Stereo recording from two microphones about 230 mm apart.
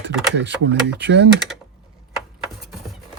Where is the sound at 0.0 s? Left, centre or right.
Right.